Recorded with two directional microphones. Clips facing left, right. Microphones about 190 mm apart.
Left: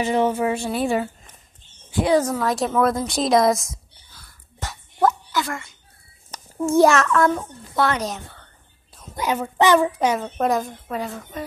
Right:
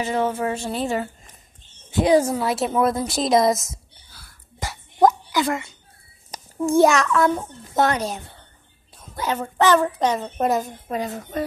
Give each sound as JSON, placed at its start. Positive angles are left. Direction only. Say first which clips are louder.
{"t": 0.0, "sound": "a woman's voice", "louder": "left 3 dB", "side_deg": 15}
{"t": 1.9, "sound": "a woman's voice", "louder": "right 2 dB", "side_deg": -20}
{"t": 4.1, "sound": "a sound", "louder": "right 1 dB", "side_deg": -10}
{"t": 6.9, "sound": "a woman's voice", "louder": "left 1 dB", "side_deg": 0}
{"t": 7.7, "sound": "a woman's voice", "louder": "right 1 dB", "side_deg": -45}
{"t": 9.1, "sound": "a woman's voice", "louder": "left 2 dB", "side_deg": 10}
{"t": 10.4, "sound": "a woman's voice", "louder": "even", "side_deg": 0}